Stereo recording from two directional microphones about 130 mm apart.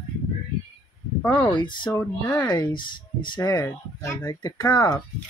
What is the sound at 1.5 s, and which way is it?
Speech, 35° left (ahead or behind).